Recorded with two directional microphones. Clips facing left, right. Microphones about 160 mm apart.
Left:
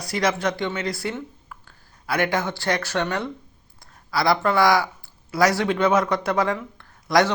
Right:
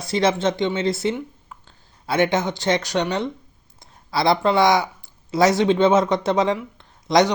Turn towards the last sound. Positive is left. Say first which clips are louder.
# right 2 dB
turn(degrees=-20)  # may be behind; listen again after turning